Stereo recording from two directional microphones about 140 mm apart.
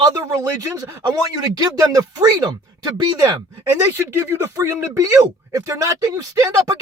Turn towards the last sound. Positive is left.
turn(degrees=-25)  # may be behind; listen again after turning